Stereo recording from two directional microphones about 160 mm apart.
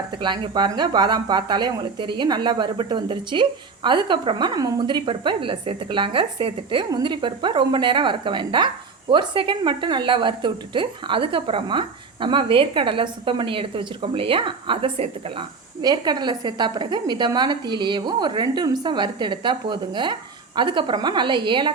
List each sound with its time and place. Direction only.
0.2 s a woman's voice: 30° right (ahead or behind)